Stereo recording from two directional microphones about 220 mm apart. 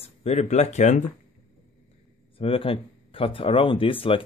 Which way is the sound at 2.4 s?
25° left (ahead or behind).